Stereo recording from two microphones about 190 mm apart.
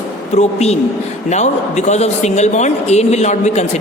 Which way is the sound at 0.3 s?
35° left (ahead or behind).